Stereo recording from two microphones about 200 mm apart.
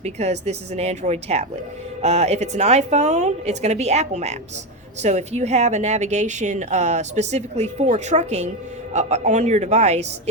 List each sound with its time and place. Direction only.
0.0 s speech: 35° right (ahead or behind)